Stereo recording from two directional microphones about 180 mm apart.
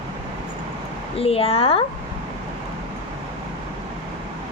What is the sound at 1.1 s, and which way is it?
Speech, 30° left (ahead or behind).